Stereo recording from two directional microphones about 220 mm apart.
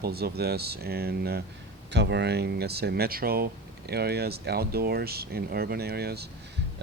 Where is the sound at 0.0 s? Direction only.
45° right (ahead or behind).